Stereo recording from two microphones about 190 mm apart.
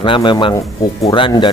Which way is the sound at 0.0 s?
25° left (ahead or behind).